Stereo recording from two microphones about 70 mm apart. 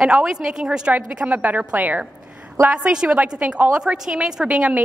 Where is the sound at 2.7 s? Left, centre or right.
Centre.